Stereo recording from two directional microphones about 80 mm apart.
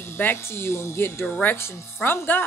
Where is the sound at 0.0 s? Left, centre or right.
Left.